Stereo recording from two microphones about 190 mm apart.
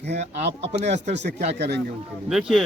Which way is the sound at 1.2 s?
65° right (ahead or behind).